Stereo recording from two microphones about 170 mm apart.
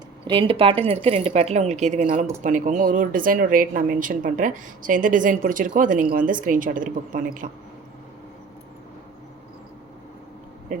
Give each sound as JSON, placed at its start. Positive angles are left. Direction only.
{"t": 0.3, "sound": "a woman's voice", "side_deg": -30}
{"t": 10.7, "sound": "speech", "side_deg": -50}